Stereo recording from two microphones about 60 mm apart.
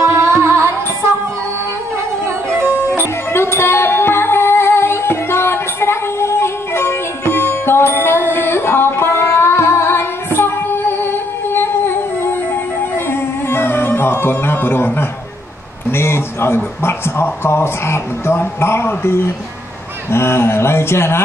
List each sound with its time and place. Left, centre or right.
0.0 s music: right
2.2 s music: right
3.3 s music: left
15.9 s speech: left